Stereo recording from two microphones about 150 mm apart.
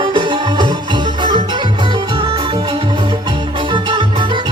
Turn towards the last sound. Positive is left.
turn(degrees=-35)  # may be behind; listen again after turning